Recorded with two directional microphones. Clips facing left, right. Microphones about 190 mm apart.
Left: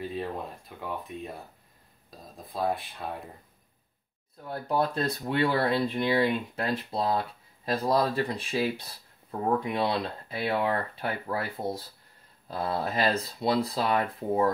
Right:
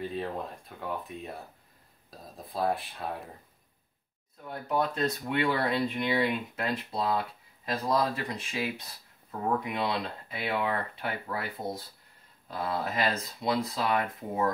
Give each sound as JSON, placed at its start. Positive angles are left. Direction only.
{"t": 0.1, "sound": "speech", "side_deg": 0}
{"t": 4.5, "sound": "speech", "side_deg": 30}